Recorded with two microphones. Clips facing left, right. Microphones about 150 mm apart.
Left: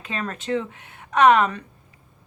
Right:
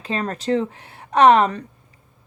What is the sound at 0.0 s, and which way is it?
Speech, 35° right (ahead or behind).